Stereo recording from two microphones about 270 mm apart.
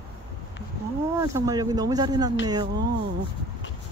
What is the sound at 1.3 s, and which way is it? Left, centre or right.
Speech, centre.